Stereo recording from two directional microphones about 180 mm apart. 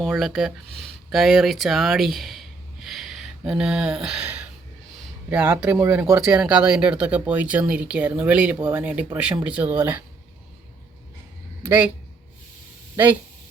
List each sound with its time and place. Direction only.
0.0 s speech: centre (ahead or behind)